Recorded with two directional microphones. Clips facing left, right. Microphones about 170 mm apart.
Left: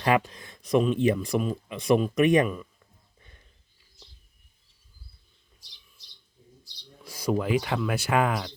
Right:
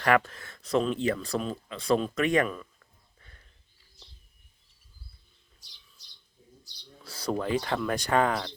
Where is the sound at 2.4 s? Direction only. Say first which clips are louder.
Left 3 dB; 10° left (ahead or behind).